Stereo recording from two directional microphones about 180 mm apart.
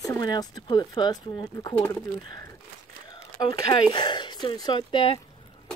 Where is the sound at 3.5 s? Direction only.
25° left (ahead or behind).